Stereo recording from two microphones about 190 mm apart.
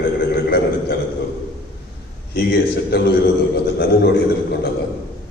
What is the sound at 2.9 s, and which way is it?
Speech, 55° left (ahead or behind).